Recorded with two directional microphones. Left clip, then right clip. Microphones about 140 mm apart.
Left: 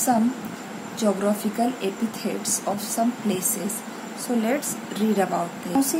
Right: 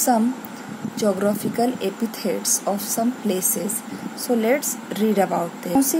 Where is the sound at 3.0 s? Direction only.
50° right (ahead or behind).